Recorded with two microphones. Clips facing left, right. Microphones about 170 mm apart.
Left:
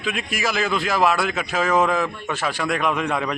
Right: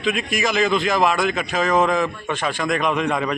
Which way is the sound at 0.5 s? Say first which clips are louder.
Right 5 dB; 15° right (ahead or behind).